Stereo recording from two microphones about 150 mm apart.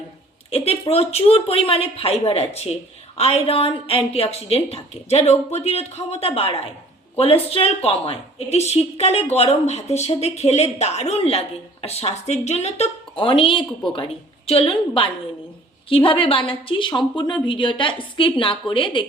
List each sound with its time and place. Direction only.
0.5 s a woman's voice: 40° left (ahead or behind)